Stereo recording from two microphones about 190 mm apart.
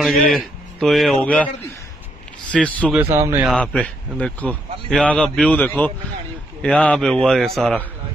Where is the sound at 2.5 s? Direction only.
5° left (ahead or behind).